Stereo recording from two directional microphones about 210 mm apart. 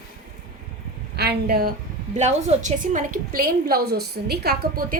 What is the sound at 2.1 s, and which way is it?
A woman's voice, 35° right (ahead or behind).